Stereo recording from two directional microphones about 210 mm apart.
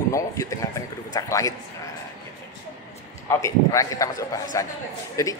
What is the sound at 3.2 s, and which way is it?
Speech, 15° left (ahead or behind).